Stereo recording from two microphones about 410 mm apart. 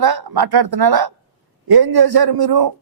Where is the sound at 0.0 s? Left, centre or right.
Right.